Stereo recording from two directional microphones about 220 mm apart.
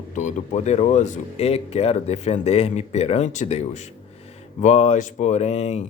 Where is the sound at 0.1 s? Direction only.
35° left (ahead or behind).